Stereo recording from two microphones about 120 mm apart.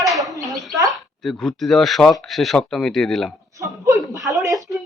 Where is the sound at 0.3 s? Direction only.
30° right (ahead or behind).